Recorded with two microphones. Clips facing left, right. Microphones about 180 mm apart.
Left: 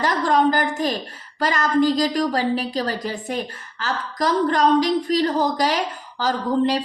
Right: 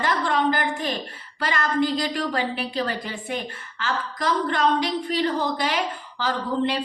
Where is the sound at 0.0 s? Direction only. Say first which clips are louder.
Left 4 dB; 40° left (ahead or behind).